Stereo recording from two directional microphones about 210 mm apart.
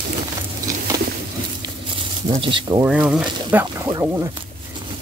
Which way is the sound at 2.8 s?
5° right (ahead or behind).